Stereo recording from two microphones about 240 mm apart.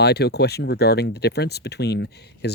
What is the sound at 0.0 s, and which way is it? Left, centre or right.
Speech, left.